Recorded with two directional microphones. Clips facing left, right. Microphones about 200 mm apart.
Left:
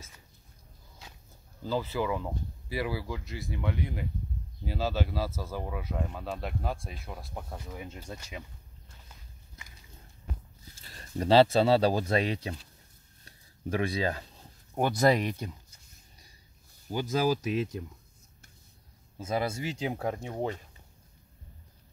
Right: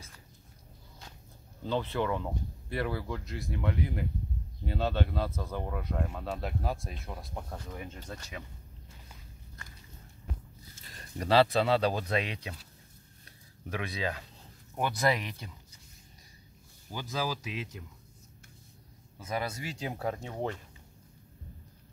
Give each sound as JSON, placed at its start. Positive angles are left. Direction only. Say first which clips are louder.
{"t": 1.6, "sound": "speech", "louder": "even", "side_deg": 5}
{"t": 11.1, "sound": "speech", "louder": "left 3 dB", "side_deg": 30}
{"t": 13.7, "sound": "speech", "louder": "left 5 dB", "side_deg": 35}
{"t": 16.9, "sound": "speech", "louder": "left 7 dB", "side_deg": 45}
{"t": 19.1, "sound": "speech", "louder": "left 4 dB", "side_deg": 25}